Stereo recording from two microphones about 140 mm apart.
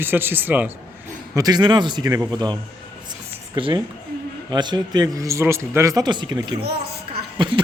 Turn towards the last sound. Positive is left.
turn(degrees=-35)  # may be behind; listen again after turning